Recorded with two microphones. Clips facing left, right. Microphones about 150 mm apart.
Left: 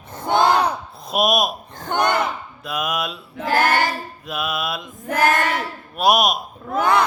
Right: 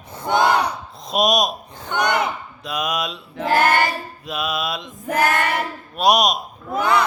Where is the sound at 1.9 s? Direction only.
55° left (ahead or behind).